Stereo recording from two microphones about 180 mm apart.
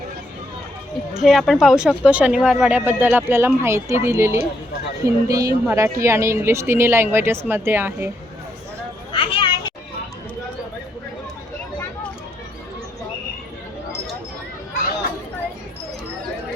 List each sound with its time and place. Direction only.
1.2 s speech: centre (ahead or behind)
9.1 s children playing: 30° left (ahead or behind)